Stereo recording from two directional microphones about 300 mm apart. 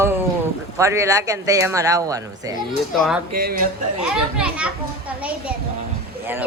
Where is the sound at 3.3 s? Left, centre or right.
Right.